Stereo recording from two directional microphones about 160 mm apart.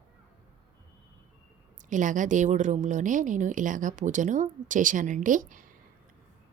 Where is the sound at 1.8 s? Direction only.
50° right (ahead or behind).